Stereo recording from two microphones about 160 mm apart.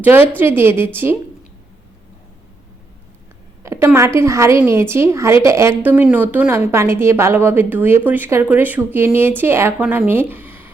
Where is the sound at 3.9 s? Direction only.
15° right (ahead or behind).